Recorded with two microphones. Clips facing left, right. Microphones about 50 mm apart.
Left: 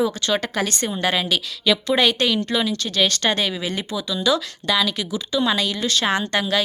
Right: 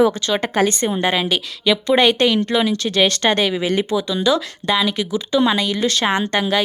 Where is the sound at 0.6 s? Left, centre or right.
Right.